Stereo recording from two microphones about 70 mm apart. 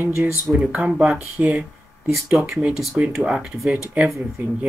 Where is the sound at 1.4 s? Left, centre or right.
Right.